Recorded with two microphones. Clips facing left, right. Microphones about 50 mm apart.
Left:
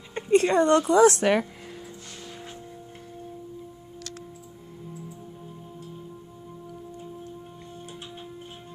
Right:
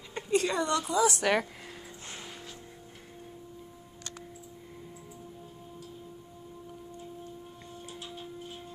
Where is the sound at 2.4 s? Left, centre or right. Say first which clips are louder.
Left 5 dB; left.